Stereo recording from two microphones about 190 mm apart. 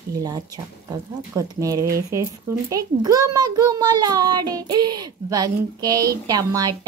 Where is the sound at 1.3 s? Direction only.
15° right (ahead or behind).